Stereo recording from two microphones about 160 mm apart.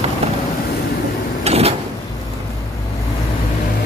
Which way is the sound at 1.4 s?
40° right (ahead or behind).